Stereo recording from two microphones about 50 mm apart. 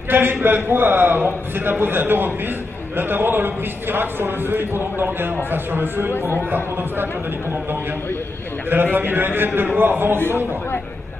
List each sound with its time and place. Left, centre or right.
0.1 s a man's voice: right
8.6 s a man's voice: right